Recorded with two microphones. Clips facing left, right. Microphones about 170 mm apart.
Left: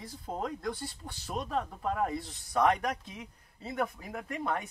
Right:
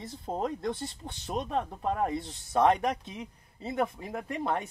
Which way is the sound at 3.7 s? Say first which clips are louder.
Right 3 dB; 25° right (ahead or behind).